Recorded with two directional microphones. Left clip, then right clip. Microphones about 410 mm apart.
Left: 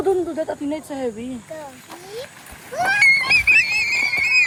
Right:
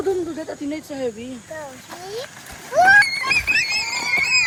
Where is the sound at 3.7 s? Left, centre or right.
Centre.